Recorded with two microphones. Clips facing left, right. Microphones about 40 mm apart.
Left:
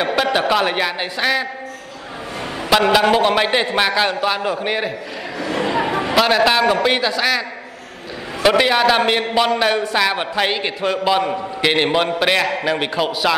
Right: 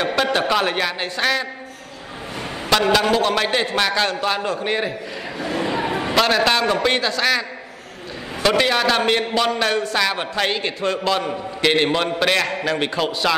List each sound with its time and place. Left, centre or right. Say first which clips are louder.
0.0 s a man's voice: left 2 dB; centre
2.7 s a man's voice: left 3 dB; centre
3.1 s a man's voice: left 3 dB; left
5.4 s a sound: left 3 dB; left
6.1 s a man's voice: left 3 dB; centre